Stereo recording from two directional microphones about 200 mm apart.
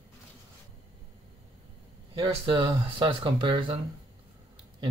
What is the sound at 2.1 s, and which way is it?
Speech, 25° right (ahead or behind).